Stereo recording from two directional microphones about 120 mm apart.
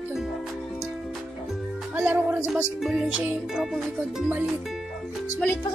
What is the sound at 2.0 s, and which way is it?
Music, 15° right (ahead or behind).